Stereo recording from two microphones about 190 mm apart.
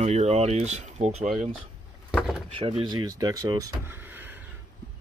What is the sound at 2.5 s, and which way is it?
Speech, 30° right (ahead or behind).